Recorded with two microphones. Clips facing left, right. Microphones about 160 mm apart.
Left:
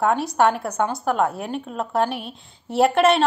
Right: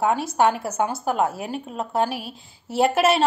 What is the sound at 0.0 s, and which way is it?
A woman's voice, centre (ahead or behind).